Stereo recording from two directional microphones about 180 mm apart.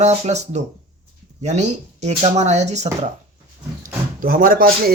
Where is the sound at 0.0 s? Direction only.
40° right (ahead or behind).